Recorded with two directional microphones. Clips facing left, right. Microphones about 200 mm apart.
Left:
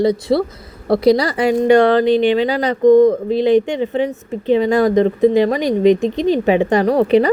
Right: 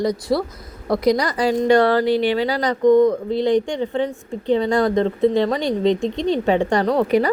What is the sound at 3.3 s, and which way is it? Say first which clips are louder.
A woman's voice: left 4 dB; 20° left (ahead or behind).